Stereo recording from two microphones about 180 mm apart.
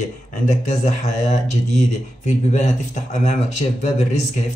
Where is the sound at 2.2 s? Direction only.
40° left (ahead or behind).